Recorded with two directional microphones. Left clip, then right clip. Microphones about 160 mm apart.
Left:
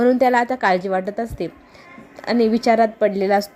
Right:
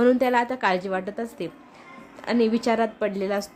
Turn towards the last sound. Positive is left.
turn(degrees=20)  # may be behind; listen again after turning